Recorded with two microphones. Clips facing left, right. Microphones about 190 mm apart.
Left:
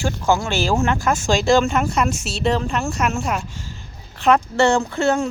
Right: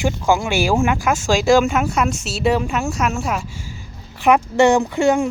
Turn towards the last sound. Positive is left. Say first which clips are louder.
# right 3 dB
turn(degrees=-15)  # may be behind; listen again after turning